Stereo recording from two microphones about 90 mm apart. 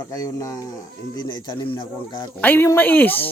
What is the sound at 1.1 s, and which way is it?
Speech, 50° left (ahead or behind).